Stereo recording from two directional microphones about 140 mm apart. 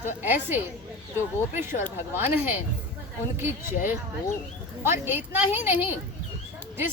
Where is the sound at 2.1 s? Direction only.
15° right (ahead or behind).